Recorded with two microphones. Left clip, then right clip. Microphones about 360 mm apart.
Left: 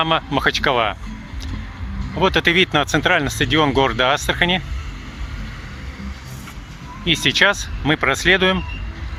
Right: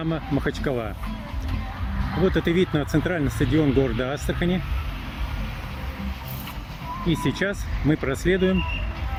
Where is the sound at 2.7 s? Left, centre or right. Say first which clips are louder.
Left 8 dB; left.